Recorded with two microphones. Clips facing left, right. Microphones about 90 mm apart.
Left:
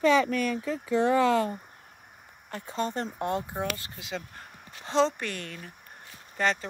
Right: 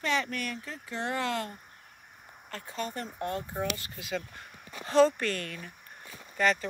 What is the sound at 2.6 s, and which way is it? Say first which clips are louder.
Speech: left 6 dB; 30° left (ahead or behind).